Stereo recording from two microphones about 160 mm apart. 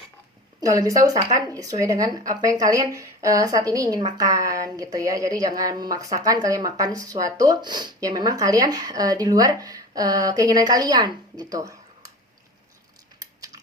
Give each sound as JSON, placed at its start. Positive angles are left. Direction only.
{"t": 0.6, "sound": "speech", "side_deg": -20}
{"t": 13.1, "sound": "biting", "side_deg": -25}